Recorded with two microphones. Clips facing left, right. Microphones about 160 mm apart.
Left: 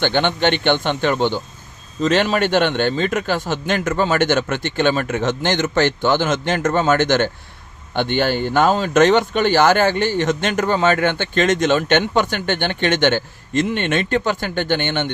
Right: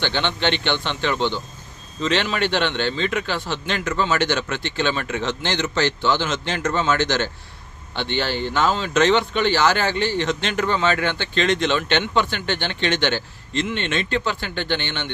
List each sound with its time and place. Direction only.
0.0 s speech: 50° left (ahead or behind)